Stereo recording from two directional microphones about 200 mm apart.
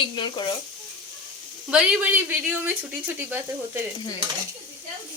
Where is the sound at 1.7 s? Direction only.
5° right (ahead or behind).